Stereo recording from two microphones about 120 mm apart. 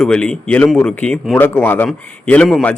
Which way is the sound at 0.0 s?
5° left (ahead or behind).